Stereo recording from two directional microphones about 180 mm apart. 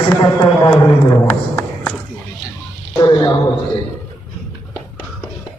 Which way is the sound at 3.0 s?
25° left (ahead or behind).